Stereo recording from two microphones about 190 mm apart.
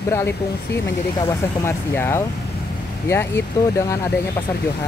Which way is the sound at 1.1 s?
15° left (ahead or behind).